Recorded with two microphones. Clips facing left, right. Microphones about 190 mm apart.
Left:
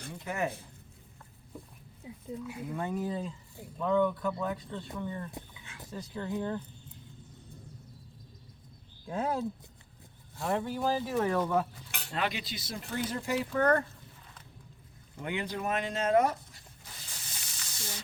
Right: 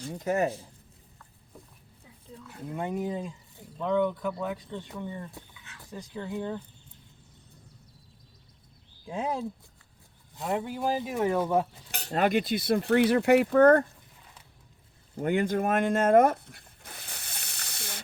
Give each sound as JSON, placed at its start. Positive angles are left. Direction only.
{"t": 0.1, "sound": "speech", "side_deg": -40}
{"t": 2.0, "sound": "a sound", "side_deg": 15}
{"t": 2.7, "sound": "speech", "side_deg": -20}
{"t": 5.3, "sound": "a sound", "side_deg": 20}
{"t": 5.9, "sound": "speech", "side_deg": -15}
{"t": 9.0, "sound": "speech", "side_deg": -15}
{"t": 11.9, "sound": "speech", "side_deg": -40}
{"t": 15.1, "sound": "zipper", "side_deg": -45}